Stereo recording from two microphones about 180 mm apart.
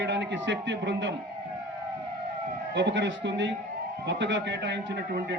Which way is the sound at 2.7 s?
80° right.